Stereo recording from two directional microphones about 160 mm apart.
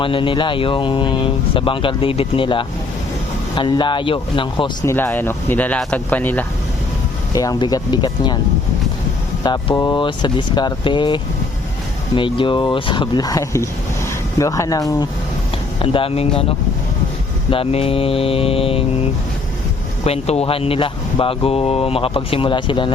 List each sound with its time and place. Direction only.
0.0 s speech: 30° left (ahead or behind)
4.9 s speech: 15° left (ahead or behind)
7.3 s speech: 25° left (ahead or behind)
9.4 s speech: 25° left (ahead or behind)
15.8 s speech: 35° left (ahead or behind)
17.5 s speech: 35° left (ahead or behind)
20.1 s speech: 40° left (ahead or behind)